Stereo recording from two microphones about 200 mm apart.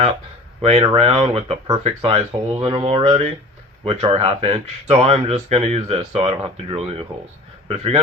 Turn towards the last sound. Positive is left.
turn(degrees=-30)  # may be behind; listen again after turning